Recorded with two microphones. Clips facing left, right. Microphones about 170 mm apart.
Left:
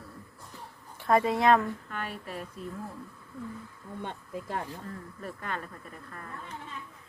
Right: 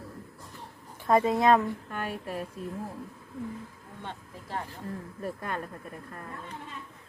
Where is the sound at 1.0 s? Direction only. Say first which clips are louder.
Right 1 dB; 20° right (ahead or behind).